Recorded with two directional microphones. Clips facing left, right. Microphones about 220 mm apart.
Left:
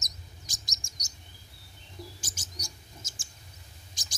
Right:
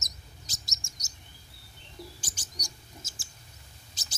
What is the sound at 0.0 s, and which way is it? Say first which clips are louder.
Chirp: even; 15° left (ahead or behind).